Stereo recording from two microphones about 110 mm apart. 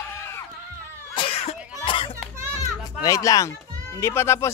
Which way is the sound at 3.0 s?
30° left (ahead or behind).